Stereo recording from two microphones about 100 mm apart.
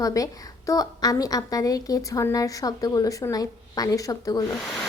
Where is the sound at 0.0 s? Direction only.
35° left (ahead or behind).